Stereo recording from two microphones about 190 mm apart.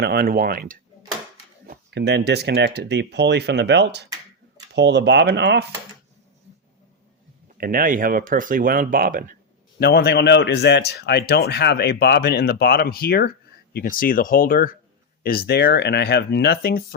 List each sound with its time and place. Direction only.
0.0 s speech: 55° right (ahead or behind)
7.6 s speech: 50° right (ahead or behind)
9.8 s speech: 55° left (ahead or behind)